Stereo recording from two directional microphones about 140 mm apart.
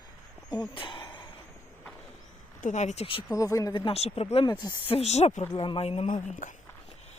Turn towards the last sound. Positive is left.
turn(degrees=70)  # may be behind; listen again after turning